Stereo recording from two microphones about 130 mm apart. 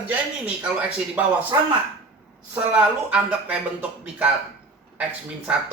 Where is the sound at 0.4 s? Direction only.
10° right (ahead or behind).